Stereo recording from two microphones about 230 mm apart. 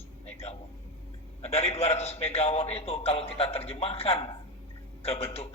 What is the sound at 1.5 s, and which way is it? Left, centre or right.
A man's voice, left.